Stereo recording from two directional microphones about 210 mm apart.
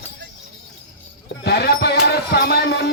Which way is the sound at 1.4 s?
50° left (ahead or behind).